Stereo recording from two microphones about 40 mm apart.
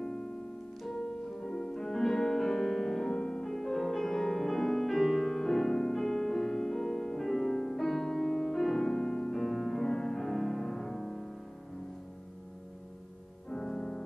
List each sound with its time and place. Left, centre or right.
0.0 s piano: centre
1.4 s music: centre
3.1 s music: centre
13.5 s music: centre